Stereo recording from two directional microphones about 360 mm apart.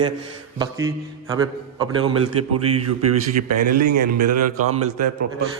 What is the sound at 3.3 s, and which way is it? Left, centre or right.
Speech, right.